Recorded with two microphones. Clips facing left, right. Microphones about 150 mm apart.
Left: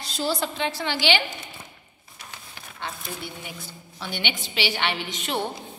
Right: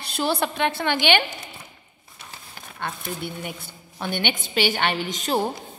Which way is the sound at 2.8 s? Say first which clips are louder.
Right 4 dB; 55° right (ahead or behind).